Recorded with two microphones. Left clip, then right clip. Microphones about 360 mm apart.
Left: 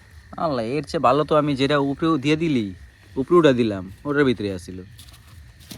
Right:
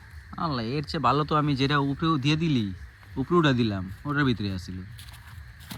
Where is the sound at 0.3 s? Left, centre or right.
Centre.